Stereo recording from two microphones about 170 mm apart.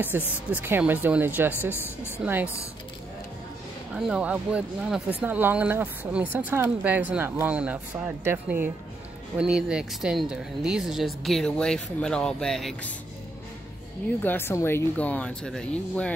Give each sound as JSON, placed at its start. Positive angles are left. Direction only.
{"t": 0.1, "sound": "speech", "side_deg": -15}
{"t": 1.7, "sound": "speech", "side_deg": 15}
{"t": 2.2, "sound": "speech", "side_deg": -10}
{"t": 3.9, "sound": "speech", "side_deg": -5}
{"t": 14.2, "sound": "speech", "side_deg": 15}